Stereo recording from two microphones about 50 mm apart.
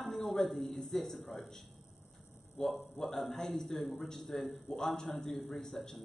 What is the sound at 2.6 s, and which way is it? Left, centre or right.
A man's voice, centre.